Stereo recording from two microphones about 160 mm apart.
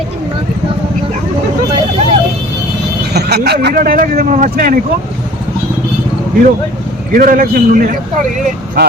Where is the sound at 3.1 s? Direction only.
90° right; by 4.8 s 65° right (ahead or behind).